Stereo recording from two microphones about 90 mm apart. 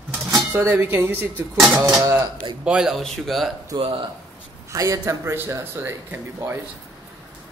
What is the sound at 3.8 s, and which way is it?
Speech, 70° right (ahead or behind).